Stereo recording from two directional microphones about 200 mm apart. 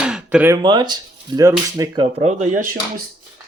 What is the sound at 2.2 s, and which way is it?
Speech, 35° right (ahead or behind).